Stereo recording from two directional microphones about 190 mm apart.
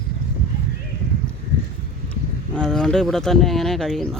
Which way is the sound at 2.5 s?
5° left (ahead or behind).